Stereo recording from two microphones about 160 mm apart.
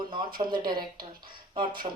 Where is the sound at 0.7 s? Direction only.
65° right (ahead or behind).